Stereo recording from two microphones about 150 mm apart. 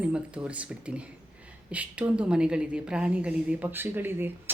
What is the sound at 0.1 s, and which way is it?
A woman's voice, 10° right (ahead or behind).